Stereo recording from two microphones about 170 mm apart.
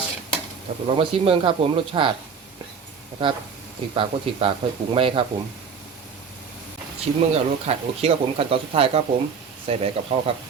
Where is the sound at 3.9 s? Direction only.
30° right (ahead or behind).